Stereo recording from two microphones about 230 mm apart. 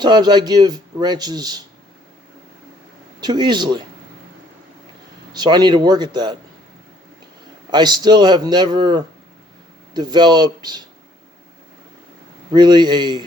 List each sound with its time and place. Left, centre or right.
0.0 s a man's voice: centre
3.2 s speech: centre
5.3 s speech: centre
7.7 s a man's voice: centre
12.5 s speech: centre